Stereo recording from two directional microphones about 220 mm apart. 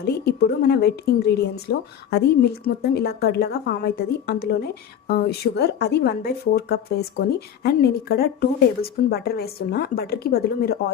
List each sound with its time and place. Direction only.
0.0 s a woman's voice: 45° left (ahead or behind)